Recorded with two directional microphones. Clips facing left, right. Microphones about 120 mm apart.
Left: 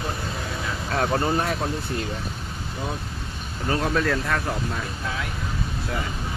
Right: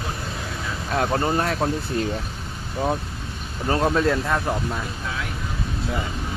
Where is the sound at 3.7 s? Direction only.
25° right (ahead or behind).